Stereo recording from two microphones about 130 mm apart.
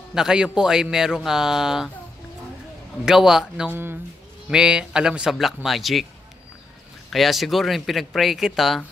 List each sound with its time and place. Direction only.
0.1 s a man's voice: 5° right (ahead or behind)
3.1 s a man's voice: 5° right (ahead or behind)
3.7 s a man's voice: 15° right (ahead or behind); by 6.0 s centre (ahead or behind)
7.1 s a man's voice: centre (ahead or behind)